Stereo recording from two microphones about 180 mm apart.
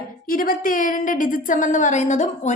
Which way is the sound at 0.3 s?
50° left (ahead or behind).